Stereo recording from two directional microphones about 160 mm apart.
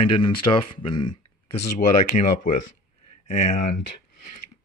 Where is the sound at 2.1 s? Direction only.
55° left (ahead or behind).